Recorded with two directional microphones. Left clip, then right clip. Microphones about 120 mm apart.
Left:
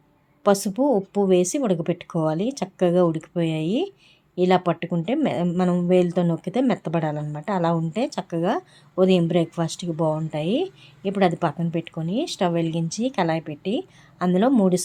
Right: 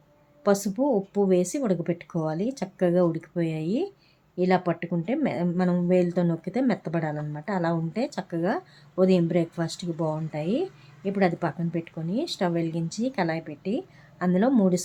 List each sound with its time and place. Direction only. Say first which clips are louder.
0.4 s a woman's voice: left 4 dB; 30° left (ahead or behind)